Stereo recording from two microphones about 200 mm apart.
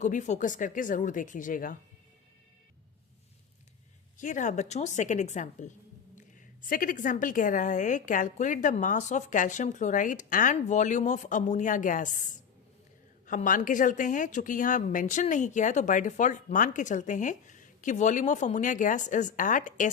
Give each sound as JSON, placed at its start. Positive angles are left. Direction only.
{"t": 0.0, "sound": "a woman's voice", "side_deg": 35}
{"t": 4.2, "sound": "a woman's voice", "side_deg": 40}